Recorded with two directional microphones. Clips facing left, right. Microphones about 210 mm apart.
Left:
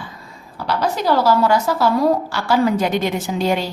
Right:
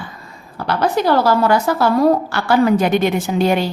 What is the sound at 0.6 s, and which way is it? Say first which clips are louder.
A woman's voice: right 3 dB; 55° right (ahead or behind).